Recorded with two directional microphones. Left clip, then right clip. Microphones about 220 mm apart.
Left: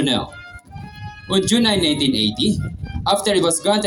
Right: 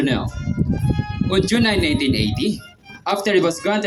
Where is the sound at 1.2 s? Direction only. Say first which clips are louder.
Left 1 dB; 25° left (ahead or behind).